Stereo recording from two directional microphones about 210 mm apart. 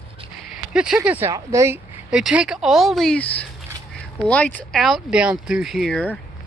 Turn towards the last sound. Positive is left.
turn(degrees=5)  # may be behind; listen again after turning